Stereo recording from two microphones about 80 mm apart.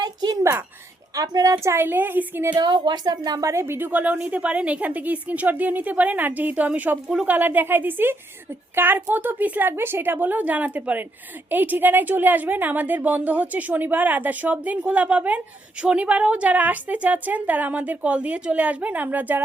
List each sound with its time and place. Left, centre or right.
0.0 s a sound: right
1.1 s a woman's voice: right
1.5 s a woman's voice: right
2.6 s a woman's voice: right
3.4 s a woman's voice: right